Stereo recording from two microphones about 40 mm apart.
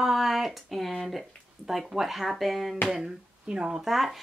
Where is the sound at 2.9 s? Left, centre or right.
Centre.